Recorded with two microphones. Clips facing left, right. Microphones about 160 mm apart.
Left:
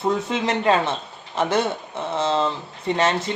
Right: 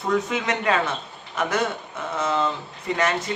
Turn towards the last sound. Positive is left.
turn(degrees=25)  # may be behind; listen again after turning